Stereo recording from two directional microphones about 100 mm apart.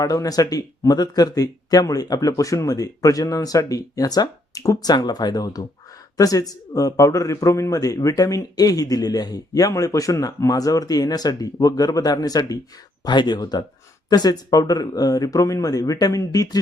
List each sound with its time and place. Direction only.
0.0 s speech: 35° left (ahead or behind)